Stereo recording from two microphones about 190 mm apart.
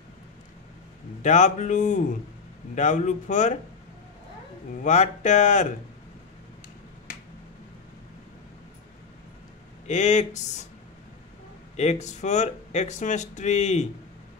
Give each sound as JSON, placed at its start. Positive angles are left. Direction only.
{"t": 1.2, "sound": "speech", "side_deg": 40}
{"t": 4.8, "sound": "speech", "side_deg": 40}
{"t": 9.8, "sound": "speech", "side_deg": 40}
{"t": 11.7, "sound": "speech", "side_deg": 35}